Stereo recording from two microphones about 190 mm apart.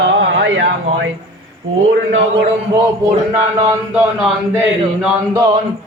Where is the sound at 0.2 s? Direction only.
80° right.